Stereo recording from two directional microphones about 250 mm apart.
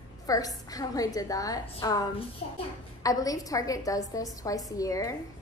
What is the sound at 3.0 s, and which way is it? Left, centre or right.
A woman's voice, centre.